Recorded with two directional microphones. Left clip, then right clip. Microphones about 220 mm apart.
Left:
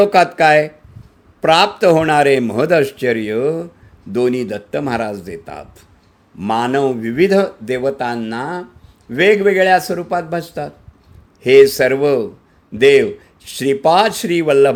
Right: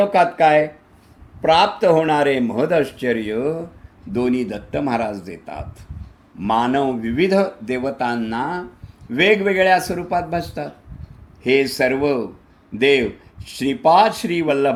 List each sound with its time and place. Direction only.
0.0 s speech: 50° left (ahead or behind)